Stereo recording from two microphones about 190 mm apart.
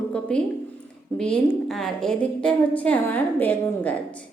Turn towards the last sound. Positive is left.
turn(degrees=10)  # may be behind; listen again after turning